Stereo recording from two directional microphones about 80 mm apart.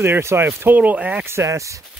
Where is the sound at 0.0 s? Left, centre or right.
Right.